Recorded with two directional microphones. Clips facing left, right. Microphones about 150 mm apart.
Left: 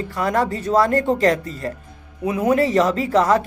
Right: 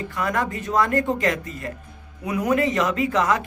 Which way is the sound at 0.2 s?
35° left (ahead or behind).